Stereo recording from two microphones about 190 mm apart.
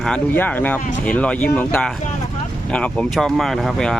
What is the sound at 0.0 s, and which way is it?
Speech, 5° left (ahead or behind).